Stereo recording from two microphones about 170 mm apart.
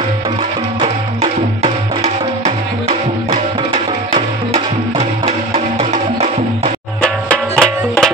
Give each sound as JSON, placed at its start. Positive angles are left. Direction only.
{"t": 0.7, "sound": "music", "side_deg": -35}
{"t": 7.0, "sound": "music", "side_deg": 5}